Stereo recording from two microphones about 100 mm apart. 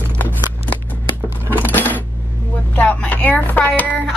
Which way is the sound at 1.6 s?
20° left (ahead or behind).